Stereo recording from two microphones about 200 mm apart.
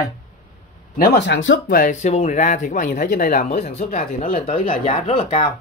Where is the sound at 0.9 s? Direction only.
55° left (ahead or behind); by 1.6 s 70° left (ahead or behind).